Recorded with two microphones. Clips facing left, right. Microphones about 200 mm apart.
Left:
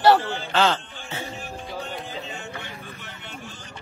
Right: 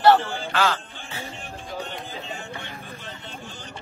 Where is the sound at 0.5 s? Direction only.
25° left (ahead or behind).